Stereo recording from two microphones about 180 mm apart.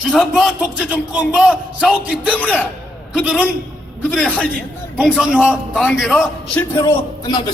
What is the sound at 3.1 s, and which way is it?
Speech, 5° right (ahead or behind).